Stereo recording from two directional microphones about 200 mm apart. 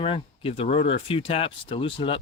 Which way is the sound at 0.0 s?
30° left (ahead or behind).